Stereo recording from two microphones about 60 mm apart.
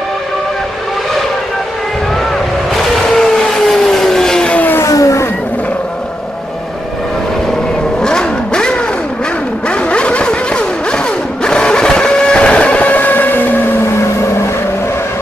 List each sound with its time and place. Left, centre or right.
2.7 s vehicle: centre
4.8 s vehicle: left
8.0 s vehicle: centre; by 13.5 s left